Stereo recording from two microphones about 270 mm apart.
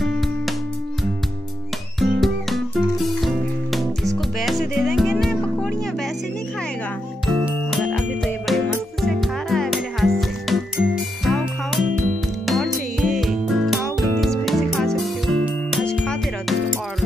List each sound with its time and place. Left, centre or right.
0.0 s music: centre
2.0 s music: centre
7.2 s music: centre